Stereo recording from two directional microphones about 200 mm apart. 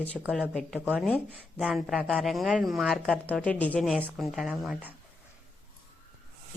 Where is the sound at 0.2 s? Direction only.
5° right (ahead or behind).